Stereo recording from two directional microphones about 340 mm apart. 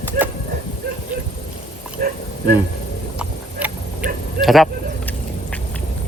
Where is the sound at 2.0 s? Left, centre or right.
Right.